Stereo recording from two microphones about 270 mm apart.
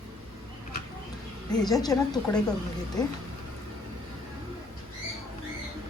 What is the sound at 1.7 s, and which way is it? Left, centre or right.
Speech, centre.